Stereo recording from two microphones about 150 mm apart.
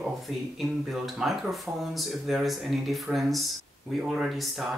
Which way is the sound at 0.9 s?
Centre (ahead or behind).